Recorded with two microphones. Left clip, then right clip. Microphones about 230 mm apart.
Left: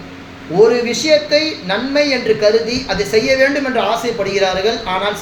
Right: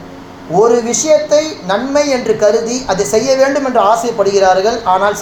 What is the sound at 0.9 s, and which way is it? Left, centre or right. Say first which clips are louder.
A woman's voice: right 2 dB; right.